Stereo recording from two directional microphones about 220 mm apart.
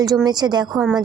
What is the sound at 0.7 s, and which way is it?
Speech, centre (ahead or behind).